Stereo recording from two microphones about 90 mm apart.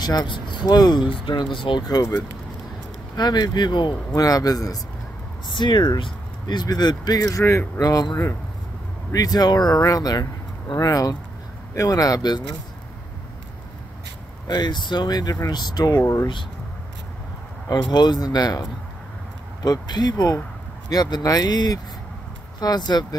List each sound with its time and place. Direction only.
0.0 s speech: 50° left (ahead or behind)
1.0 s speech: 75° left (ahead or behind)
1.9 s speech: 45° left (ahead or behind)
3.2 s speech: 50° left (ahead or behind)
4.1 s speech: 45° left (ahead or behind)
5.5 s speech: 60° left (ahead or behind)
7.2 s speech: 35° left (ahead or behind); by 12.4 s 50° left (ahead or behind)
14.5 s speech: 55° left (ahead or behind)
17.6 s speech: 50° left (ahead or behind)